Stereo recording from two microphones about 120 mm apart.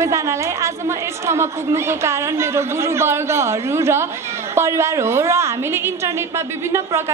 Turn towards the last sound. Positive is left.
turn(degrees=-20)  # may be behind; listen again after turning